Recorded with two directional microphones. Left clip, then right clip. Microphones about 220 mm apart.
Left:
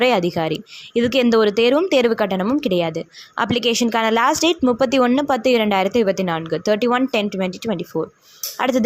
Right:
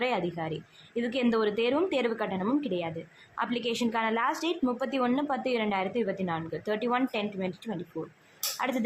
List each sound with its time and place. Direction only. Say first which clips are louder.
0.0 s speech: left 13 dB; 35° left (ahead or behind)